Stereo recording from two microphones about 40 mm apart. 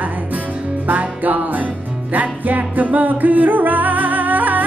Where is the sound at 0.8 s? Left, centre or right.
Right.